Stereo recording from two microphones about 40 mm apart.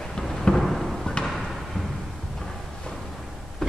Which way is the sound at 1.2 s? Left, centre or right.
Left.